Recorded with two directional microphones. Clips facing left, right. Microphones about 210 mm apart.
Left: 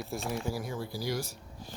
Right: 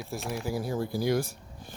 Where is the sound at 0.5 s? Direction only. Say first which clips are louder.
Right 5 dB; 35° right (ahead or behind).